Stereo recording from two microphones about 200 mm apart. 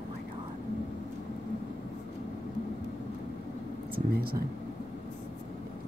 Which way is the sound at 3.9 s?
50° right (ahead or behind).